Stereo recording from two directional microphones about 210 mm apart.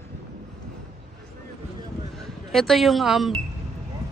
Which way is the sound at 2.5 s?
Centre (ahead or behind).